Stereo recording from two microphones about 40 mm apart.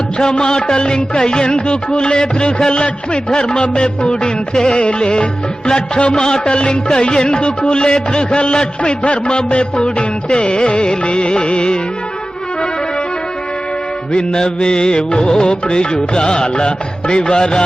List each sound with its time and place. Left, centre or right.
0.2 s music: centre
14.1 s music: centre